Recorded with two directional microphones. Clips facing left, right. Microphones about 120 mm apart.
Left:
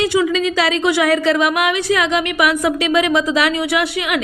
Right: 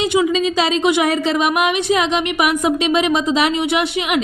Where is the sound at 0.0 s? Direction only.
20° right (ahead or behind).